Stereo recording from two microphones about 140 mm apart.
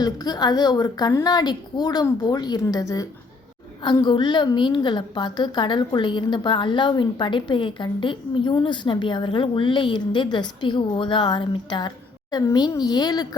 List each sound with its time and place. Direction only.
0.0 s a woman's voice: 30° left (ahead or behind)